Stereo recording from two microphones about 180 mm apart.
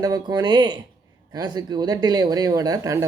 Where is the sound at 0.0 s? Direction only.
20° right (ahead or behind).